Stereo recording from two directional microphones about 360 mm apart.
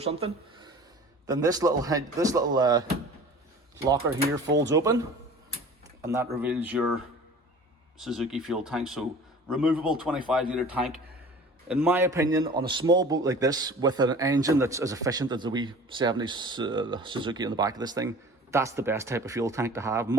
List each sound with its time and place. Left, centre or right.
0.0 s a man's voice: centre
3.8 s a man's voice: centre
4.4 s speech: right
4.7 s a man's voice: centre